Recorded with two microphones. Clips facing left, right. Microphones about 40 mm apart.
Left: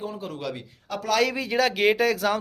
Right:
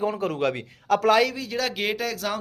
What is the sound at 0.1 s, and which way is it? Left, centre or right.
Speech, right.